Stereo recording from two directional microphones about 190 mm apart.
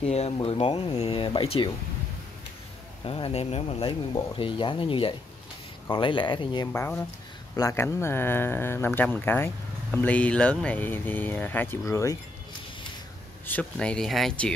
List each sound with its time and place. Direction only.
0.1 s speech: 30° left (ahead or behind)
3.1 s speech: 30° left (ahead or behind)
13.5 s speech: 5° left (ahead or behind)